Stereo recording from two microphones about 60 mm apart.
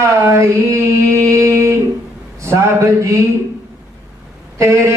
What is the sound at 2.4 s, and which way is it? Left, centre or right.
Speech, right.